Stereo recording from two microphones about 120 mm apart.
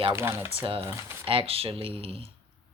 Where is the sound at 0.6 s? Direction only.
45° right (ahead or behind).